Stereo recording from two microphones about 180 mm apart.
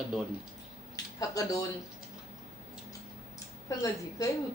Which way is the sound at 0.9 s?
20° left (ahead or behind).